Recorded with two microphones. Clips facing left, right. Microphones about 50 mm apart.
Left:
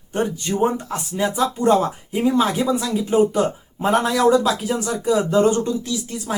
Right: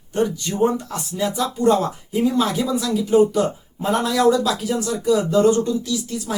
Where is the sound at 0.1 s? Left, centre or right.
Left.